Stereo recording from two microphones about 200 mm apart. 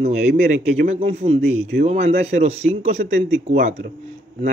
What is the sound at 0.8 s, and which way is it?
A man's voice, 30° right (ahead or behind).